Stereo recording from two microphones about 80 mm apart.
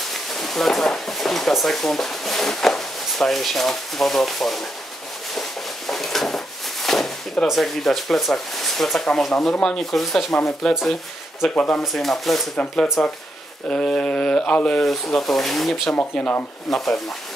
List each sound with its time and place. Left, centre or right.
0.1 s speech: centre
5.3 s a sound: centre
10.6 s speech: centre
11.4 s a sound: centre
11.8 s speech: centre
13.0 s a sound: centre
15.1 s speech: centre
16.0 s speech: left
16.7 s speech: centre